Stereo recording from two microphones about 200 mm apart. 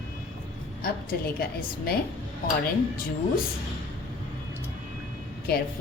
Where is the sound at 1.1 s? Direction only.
50° left (ahead or behind).